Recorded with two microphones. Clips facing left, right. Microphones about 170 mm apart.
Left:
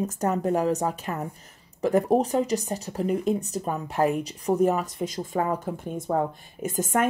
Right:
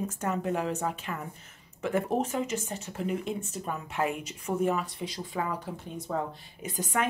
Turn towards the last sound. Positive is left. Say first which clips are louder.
# left 6 dB
turn(degrees=50)  # may be behind; listen again after turning